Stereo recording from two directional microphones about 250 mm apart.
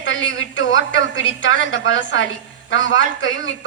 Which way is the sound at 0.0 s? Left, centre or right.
Left.